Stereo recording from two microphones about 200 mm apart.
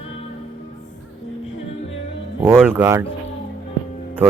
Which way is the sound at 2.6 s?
10° right (ahead or behind).